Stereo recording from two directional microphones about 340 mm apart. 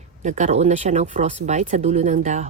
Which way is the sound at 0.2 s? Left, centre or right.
Right.